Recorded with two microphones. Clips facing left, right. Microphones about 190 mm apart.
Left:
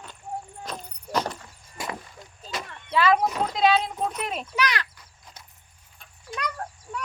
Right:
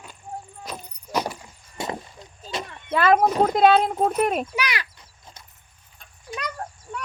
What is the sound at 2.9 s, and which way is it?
Speech, 50° right (ahead or behind).